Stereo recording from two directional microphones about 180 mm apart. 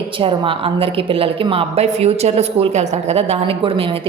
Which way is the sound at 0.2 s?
30° right (ahead or behind).